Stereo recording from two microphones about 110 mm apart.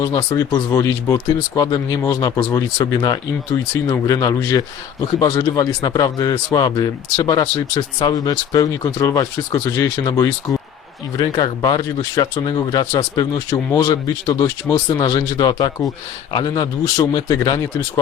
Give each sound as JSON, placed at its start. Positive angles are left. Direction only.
{"t": 0.0, "sound": "speech", "side_deg": 35}